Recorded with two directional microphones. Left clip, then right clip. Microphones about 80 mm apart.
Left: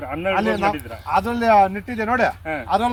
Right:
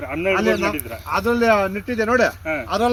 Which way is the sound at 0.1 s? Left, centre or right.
Left.